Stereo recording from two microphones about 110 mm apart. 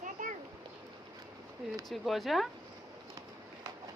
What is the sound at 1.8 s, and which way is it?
Speech, centre (ahead or behind).